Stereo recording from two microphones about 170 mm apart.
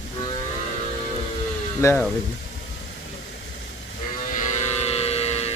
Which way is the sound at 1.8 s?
15° left (ahead or behind).